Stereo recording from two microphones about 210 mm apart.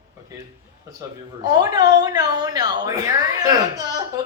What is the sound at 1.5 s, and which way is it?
A woman's voice, 20° right (ahead or behind).